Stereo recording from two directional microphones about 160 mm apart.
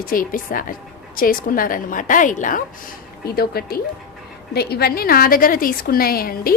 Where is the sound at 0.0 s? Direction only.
60° left (ahead or behind).